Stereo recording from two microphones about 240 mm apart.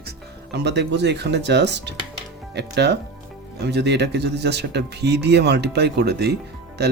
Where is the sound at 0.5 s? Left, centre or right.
Right.